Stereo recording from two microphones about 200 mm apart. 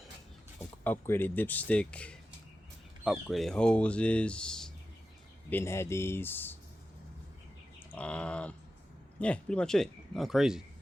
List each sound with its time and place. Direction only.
0.9 s speech: 10° left (ahead or behind)
7.9 s a sound: 5° left (ahead or behind)
9.2 s speech: 5° left (ahead or behind)